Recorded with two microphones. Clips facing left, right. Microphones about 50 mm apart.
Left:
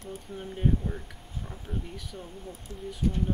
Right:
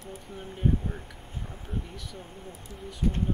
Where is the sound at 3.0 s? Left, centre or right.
Right.